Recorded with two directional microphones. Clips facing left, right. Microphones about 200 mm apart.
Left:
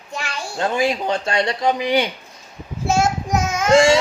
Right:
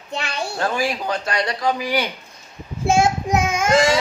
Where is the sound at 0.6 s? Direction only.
20° left (ahead or behind).